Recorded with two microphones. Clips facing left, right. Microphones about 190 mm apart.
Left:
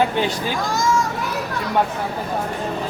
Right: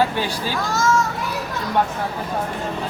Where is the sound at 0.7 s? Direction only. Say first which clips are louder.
Right 1 dB; 15° left (ahead or behind).